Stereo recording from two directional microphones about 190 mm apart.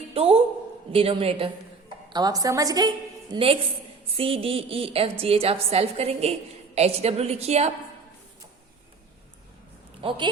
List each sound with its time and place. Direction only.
0.1 s a man's voice: 30° right (ahead or behind)
10.0 s speech: 25° right (ahead or behind)